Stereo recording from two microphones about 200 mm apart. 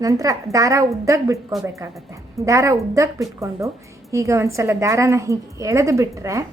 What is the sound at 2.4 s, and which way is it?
A woman's voice, 15° right (ahead or behind).